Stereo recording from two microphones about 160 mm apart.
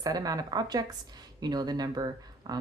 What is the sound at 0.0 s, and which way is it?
A woman's voice, 25° right (ahead or behind).